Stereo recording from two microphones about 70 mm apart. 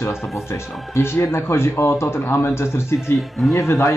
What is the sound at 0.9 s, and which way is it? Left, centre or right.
Speech, left.